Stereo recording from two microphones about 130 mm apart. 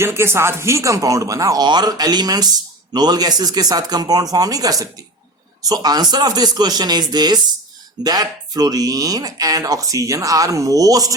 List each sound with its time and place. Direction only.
0.0 s speech: 20° right (ahead or behind)